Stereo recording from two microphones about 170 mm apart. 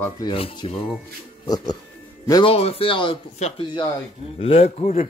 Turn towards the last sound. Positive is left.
turn(degrees=40)  # may be behind; listen again after turning